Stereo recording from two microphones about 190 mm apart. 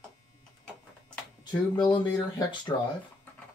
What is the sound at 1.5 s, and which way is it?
Speech, 25° left (ahead or behind).